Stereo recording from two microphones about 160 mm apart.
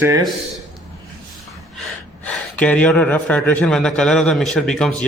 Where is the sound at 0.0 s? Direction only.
20° right (ahead or behind).